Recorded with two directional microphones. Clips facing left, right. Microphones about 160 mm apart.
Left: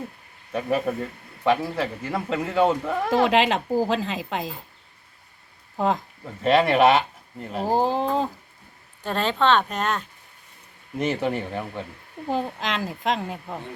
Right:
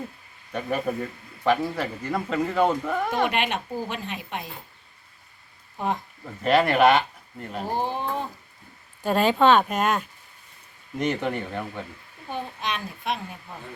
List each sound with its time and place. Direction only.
0.5 s speech: centre (ahead or behind)
3.2 s speech: 90° left
5.7 s speech: 90° left
6.2 s speech: centre (ahead or behind)
7.7 s speech: 90° left
9.0 s speech: 10° right (ahead or behind)
10.9 s speech: 5° left (ahead or behind)
12.3 s speech: 90° left